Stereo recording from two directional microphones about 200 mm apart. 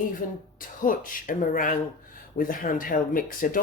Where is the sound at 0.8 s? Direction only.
40° left (ahead or behind).